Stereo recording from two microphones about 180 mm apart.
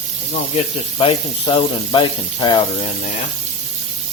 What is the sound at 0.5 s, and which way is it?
Speech, 30° left (ahead or behind).